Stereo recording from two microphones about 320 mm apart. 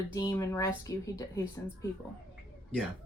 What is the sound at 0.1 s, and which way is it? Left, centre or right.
A woman's voice, centre.